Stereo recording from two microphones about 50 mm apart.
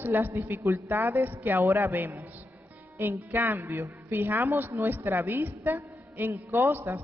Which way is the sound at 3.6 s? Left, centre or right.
Right.